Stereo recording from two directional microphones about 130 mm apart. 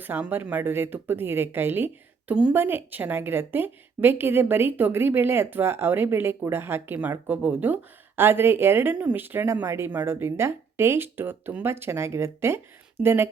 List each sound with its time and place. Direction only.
0.0 s a woman's voice: 15° right (ahead or behind)